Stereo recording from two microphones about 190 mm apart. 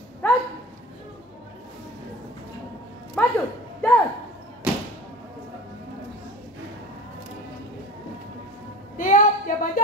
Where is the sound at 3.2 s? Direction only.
10° left (ahead or behind).